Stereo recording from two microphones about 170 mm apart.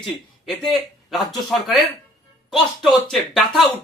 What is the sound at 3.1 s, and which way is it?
Speech, centre (ahead or behind).